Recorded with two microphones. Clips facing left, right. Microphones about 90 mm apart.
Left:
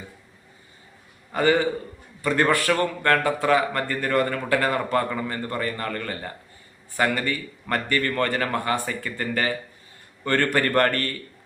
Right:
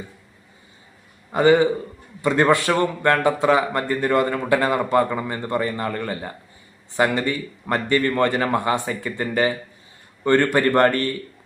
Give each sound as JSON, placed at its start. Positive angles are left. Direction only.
{"t": 1.3, "sound": "a man's voice", "side_deg": -20}